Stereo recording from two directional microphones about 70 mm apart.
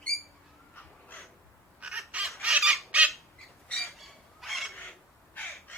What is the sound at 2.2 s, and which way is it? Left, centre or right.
Chicken, centre.